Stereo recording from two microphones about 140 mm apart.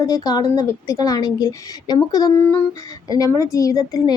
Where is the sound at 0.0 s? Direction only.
25° left (ahead or behind).